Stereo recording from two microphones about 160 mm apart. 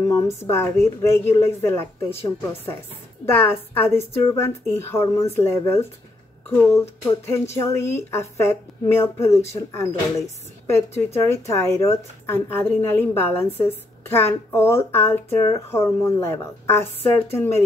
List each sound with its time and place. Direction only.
0.4 s a woman's voice: 15° left (ahead or behind)
3.3 s a woman's voice: 15° left (ahead or behind)
11.1 s a woman's voice: 20° left (ahead or behind)